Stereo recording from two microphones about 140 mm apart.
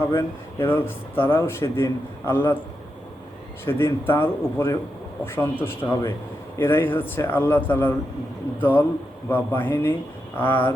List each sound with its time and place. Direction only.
0.1 s speech: 20° left (ahead or behind)
3.7 s speech: 15° left (ahead or behind)